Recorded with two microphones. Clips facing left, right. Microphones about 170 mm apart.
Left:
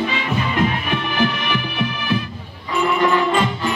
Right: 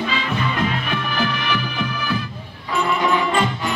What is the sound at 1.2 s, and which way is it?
Music, 20° left (ahead or behind).